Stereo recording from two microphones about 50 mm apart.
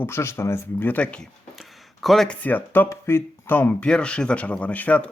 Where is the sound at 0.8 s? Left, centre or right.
Left.